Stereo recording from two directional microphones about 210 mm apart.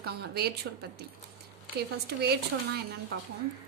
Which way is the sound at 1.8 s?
50° right (ahead or behind).